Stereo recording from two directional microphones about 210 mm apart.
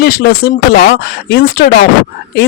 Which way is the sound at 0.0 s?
50° left (ahead or behind).